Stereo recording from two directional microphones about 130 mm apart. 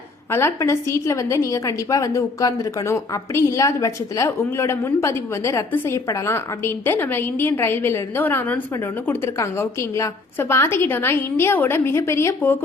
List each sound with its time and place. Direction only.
0.3 s a woman's voice: 20° left (ahead or behind)